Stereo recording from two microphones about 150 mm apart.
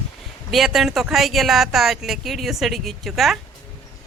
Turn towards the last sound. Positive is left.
turn(degrees=0)  # may be behind; listen again after turning